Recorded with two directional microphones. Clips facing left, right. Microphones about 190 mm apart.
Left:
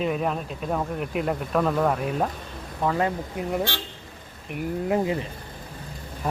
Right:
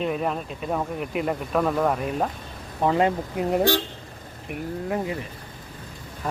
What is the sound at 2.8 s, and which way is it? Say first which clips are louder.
Speech: right 3 dB; 20° right (ahead or behind).